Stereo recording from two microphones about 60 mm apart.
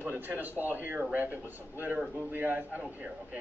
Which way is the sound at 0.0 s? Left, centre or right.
Right.